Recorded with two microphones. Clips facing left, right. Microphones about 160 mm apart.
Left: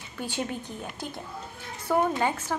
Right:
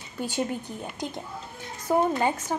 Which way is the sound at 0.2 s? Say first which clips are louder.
Right 3 dB; 10° right (ahead or behind).